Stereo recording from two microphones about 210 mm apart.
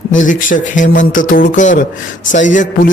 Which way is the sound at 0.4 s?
40° left (ahead or behind).